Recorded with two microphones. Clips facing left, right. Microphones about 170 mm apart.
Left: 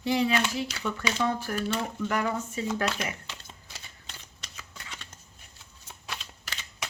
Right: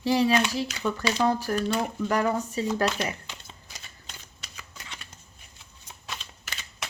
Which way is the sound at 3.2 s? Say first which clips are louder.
Even; 15° right (ahead or behind).